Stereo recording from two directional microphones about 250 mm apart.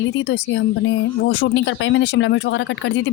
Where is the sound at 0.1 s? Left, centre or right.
Left.